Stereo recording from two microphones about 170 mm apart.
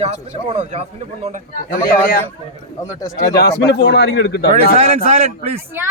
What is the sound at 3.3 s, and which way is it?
A man's voice, 80° left.